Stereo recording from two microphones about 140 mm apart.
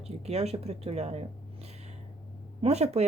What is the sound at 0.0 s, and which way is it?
Speech, 50° right (ahead or behind).